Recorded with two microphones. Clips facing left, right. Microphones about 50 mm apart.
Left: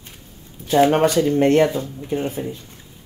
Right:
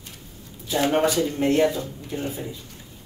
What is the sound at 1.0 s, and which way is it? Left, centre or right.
Speech, left.